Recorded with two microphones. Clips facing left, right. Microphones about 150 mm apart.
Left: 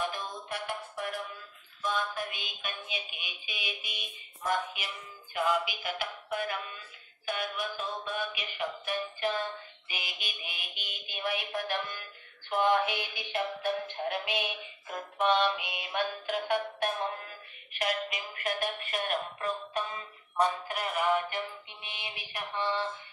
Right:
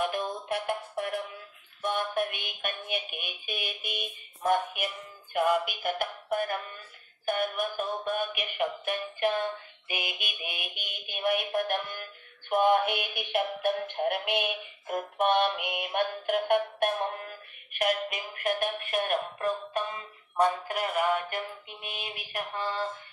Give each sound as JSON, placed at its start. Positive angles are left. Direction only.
{"t": 0.0, "sound": "music", "side_deg": -55}